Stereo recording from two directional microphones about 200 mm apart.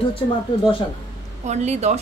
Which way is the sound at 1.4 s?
35° right (ahead or behind).